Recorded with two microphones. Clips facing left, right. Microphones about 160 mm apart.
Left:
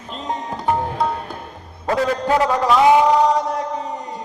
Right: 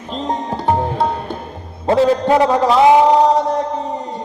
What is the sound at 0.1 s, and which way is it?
Music, 35° right (ahead or behind).